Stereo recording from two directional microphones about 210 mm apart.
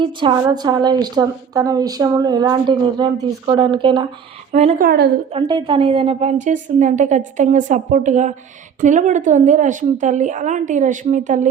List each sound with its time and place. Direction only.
0.0 s a woman's voice: 20° right (ahead or behind)
4.9 s a woman's voice: 50° right (ahead or behind)
5.3 s a woman's voice: 25° right (ahead or behind)